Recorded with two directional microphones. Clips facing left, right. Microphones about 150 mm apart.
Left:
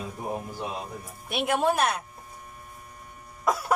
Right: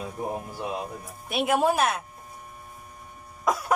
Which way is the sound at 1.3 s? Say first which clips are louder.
Right 2 dB; centre (ahead or behind).